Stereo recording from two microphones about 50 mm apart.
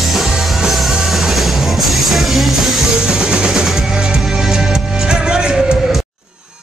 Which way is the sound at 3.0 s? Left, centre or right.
Centre.